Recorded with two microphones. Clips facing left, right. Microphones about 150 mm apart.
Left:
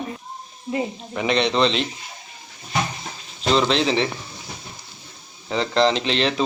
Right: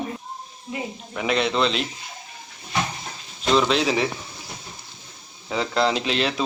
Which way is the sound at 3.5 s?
5° right (ahead or behind).